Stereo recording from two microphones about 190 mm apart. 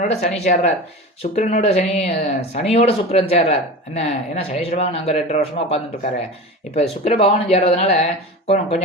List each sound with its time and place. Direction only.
0.1 s speech: 35° left (ahead or behind)